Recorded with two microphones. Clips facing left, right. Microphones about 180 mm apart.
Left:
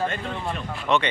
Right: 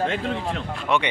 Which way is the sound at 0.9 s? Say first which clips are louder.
Left 1 dB; 10° right (ahead or behind).